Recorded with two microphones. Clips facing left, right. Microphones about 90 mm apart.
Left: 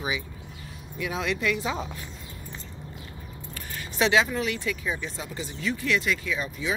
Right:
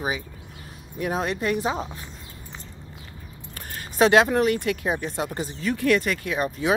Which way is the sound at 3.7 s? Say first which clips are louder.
Right 6 dB; 45° right (ahead or behind).